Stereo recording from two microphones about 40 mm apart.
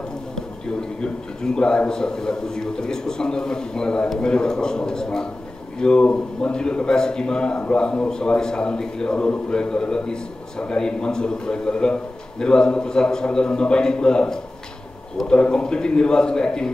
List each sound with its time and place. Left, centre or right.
0.7 s a man's voice: centre